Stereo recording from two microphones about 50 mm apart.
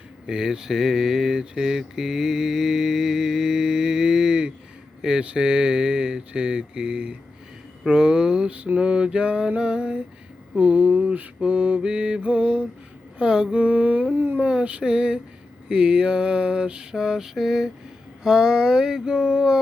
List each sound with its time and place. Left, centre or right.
0.3 s mantra: centre
16.9 s mantra: centre